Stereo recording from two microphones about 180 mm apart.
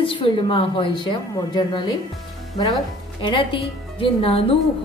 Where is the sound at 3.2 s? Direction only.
25° left (ahead or behind).